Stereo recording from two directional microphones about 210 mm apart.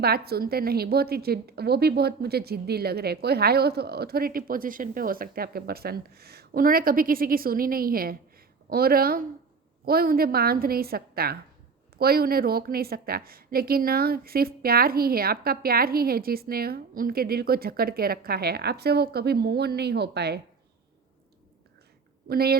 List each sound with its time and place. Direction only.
0.0 s a woman's voice: 50° right (ahead or behind)
22.3 s a woman's voice: 45° right (ahead or behind)